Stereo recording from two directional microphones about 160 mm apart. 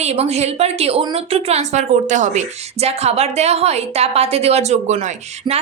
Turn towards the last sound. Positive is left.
turn(degrees=-45)  # may be behind; listen again after turning